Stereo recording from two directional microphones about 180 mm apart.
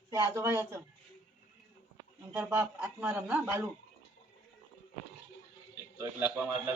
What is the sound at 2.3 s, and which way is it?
Speech, 10° right (ahead or behind).